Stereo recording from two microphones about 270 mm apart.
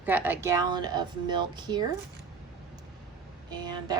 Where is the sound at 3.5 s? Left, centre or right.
Centre.